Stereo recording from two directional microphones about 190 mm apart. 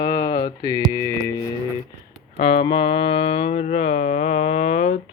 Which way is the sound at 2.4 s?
30° left (ahead or behind).